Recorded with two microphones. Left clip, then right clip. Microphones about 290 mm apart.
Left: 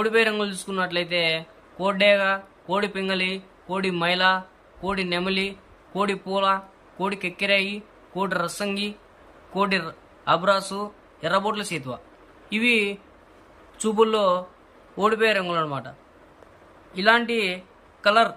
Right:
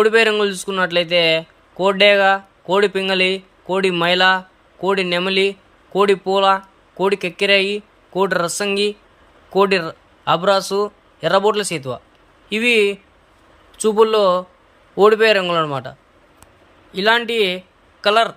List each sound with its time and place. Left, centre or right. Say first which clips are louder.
0.0 s a man's voice: right 7 dB; centre
16.9 s a man's voice: right 4 dB; centre